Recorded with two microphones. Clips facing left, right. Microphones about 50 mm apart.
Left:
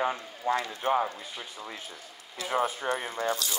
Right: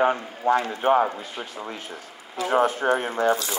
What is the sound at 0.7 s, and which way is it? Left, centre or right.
Speech, right.